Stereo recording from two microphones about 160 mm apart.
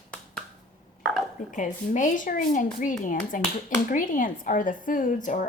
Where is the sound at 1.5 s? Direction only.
55° left (ahead or behind).